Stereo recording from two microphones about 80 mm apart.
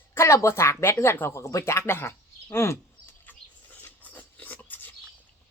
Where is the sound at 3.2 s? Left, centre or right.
Left.